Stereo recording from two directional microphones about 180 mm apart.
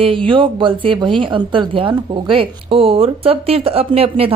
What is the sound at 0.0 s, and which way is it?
A woman's voice, 30° right (ahead or behind).